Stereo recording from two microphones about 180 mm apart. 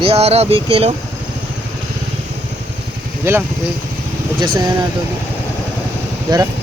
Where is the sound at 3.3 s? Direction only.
15° right (ahead or behind).